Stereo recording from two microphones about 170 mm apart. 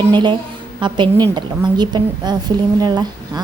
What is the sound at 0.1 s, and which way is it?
A woman's voice, 25° right (ahead or behind).